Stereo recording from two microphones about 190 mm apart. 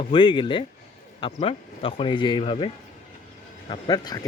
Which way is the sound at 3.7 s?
20° left (ahead or behind).